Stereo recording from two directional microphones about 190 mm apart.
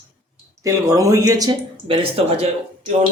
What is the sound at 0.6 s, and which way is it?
Speech, 15° right (ahead or behind).